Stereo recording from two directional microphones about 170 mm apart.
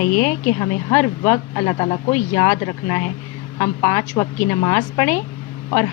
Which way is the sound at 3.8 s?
15° left (ahead or behind).